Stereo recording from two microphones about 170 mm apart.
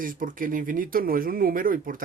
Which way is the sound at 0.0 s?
55° right (ahead or behind).